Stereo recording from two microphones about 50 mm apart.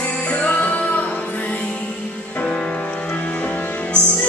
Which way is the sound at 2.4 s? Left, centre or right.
Centre.